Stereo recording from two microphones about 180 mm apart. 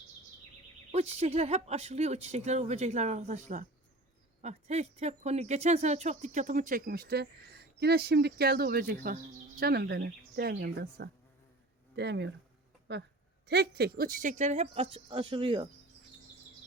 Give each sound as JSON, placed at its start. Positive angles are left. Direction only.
{"t": 0.9, "sound": "a woman's voice", "side_deg": -35}